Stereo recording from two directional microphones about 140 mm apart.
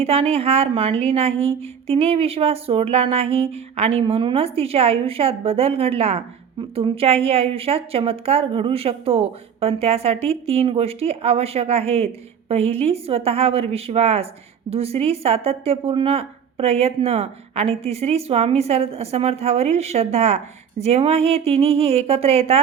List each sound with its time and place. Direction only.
0.0 s a woman's voice: 45° right (ahead or behind)